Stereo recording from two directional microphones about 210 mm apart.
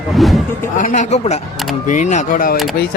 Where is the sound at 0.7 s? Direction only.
35° left (ahead or behind).